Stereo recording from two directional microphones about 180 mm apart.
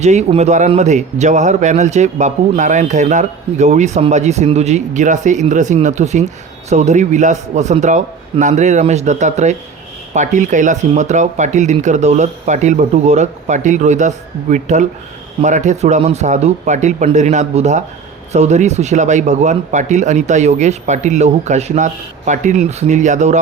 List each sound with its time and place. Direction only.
0.0 s speech: 40° right (ahead or behind)